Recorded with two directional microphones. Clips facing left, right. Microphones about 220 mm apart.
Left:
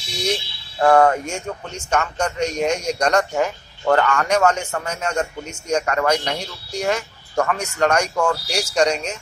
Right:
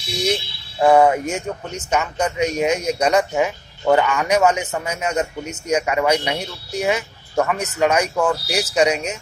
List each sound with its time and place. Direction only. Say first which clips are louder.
0.7 s speech: right 1 dB; 10° right (ahead or behind)